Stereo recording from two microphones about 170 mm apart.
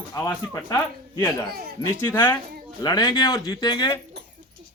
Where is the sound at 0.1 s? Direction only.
20° left (ahead or behind).